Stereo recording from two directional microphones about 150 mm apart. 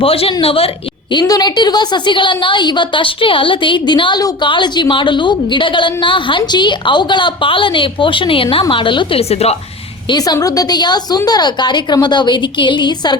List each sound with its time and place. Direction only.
0.0 s a woman's voice: 40° left (ahead or behind)
1.1 s a woman's voice: 25° left (ahead or behind); by 9.6 s 45° left (ahead or behind)
10.1 s a woman's voice: 25° left (ahead or behind)